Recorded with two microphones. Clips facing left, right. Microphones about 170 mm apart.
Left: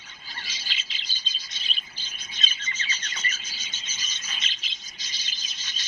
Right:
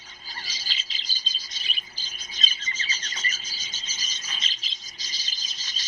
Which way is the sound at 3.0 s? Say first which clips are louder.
Even; 40° right (ahead or behind).